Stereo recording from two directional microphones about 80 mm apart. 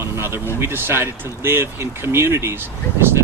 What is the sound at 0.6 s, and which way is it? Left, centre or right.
Speech, right.